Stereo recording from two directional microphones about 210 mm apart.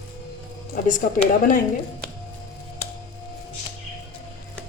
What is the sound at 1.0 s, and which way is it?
Speech, 45° left (ahead or behind).